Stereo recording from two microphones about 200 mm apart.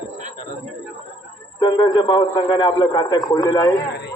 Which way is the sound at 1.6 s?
20° left (ahead or behind).